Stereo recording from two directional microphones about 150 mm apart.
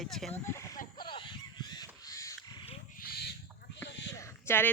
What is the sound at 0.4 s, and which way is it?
Speech, 20° left (ahead or behind).